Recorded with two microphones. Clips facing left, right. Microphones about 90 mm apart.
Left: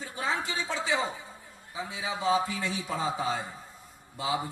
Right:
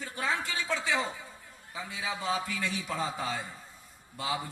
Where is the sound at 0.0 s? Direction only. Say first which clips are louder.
Left 1 dB; 20° left (ahead or behind).